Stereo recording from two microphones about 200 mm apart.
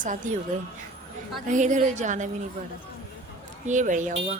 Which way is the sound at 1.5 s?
40° right (ahead or behind).